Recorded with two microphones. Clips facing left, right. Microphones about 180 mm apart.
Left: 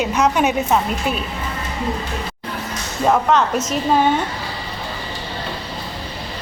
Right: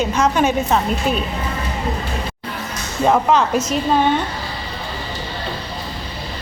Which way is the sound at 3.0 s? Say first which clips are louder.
Right 1 dB; centre (ahead or behind).